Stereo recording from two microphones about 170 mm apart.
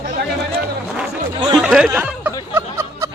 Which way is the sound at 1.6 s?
5° right (ahead or behind).